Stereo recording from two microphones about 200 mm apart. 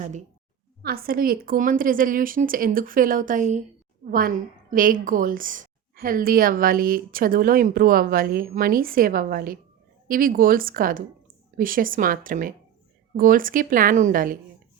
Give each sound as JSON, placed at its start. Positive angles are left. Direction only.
{"t": 0.0, "sound": "a woman's voice", "side_deg": -35}
{"t": 0.8, "sound": "a woman's voice", "side_deg": -50}